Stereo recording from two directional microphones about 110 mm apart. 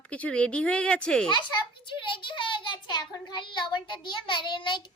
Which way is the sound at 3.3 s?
45° left (ahead or behind).